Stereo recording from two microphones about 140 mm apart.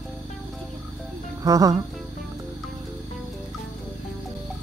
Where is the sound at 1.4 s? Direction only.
25° right (ahead or behind).